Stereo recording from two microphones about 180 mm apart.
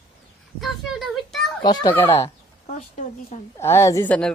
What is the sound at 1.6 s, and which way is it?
Speech, 25° left (ahead or behind).